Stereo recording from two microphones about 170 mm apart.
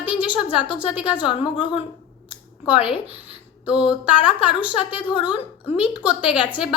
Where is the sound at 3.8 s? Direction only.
5° right (ahead or behind).